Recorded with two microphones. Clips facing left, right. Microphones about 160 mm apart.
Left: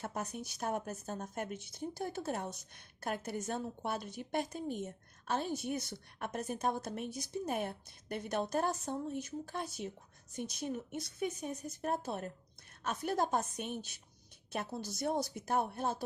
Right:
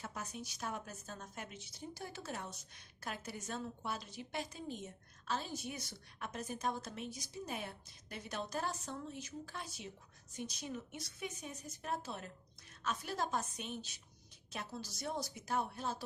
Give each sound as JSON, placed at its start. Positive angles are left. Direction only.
{"t": 0.0, "sound": "speech", "side_deg": 55}